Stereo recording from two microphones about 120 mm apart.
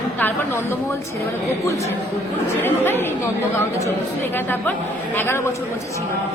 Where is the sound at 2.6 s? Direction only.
20° left (ahead or behind).